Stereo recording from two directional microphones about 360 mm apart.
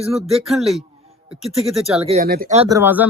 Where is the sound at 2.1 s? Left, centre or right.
Right; by 3.0 s centre.